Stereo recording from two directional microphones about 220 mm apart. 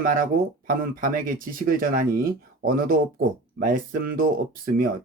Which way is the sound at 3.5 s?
40° right (ahead or behind).